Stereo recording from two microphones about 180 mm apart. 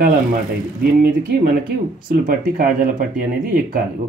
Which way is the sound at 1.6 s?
55° right (ahead or behind).